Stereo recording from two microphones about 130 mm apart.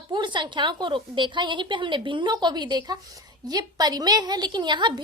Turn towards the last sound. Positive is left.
turn(degrees=-35)  # may be behind; listen again after turning